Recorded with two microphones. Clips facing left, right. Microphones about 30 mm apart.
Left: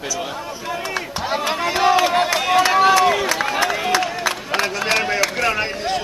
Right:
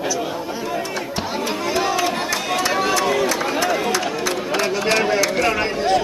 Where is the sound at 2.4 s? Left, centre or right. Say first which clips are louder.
Left 7 dB; centre.